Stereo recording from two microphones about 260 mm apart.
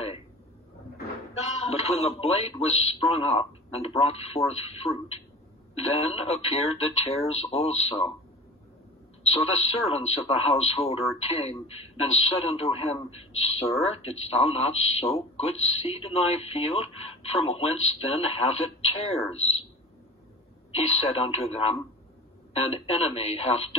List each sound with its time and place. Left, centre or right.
1.6 s speech: left
9.2 s speech: left
20.7 s speech: left